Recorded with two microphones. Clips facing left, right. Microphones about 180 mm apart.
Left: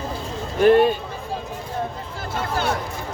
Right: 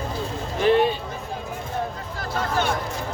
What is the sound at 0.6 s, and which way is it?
Speech, 50° left (ahead or behind).